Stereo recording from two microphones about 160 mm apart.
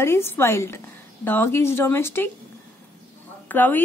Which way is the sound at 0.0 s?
15° left (ahead or behind).